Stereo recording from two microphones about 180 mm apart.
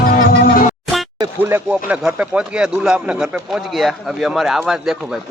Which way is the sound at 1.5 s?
10° right (ahead or behind).